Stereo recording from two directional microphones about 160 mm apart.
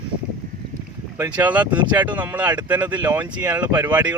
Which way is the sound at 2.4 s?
25° right (ahead or behind).